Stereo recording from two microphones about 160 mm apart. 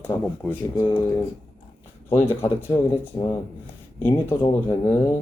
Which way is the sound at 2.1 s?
40° left (ahead or behind).